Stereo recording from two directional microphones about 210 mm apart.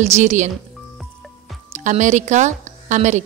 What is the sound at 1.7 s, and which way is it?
Speech, 35° right (ahead or behind).